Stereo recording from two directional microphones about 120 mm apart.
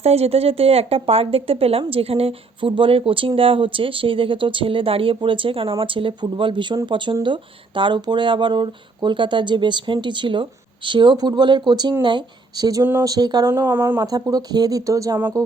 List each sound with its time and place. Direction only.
0.0 s speech: 60° right (ahead or behind); by 12.8 s 35° right (ahead or behind)
12.8 s speech: 20° right (ahead or behind)
13.1 s speech: 35° right (ahead or behind)
13.5 s speech: 20° right (ahead or behind)
14.0 s speech: 30° right (ahead or behind)